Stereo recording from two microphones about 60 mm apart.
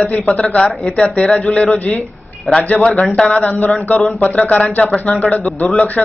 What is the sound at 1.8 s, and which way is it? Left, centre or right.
Speech, left.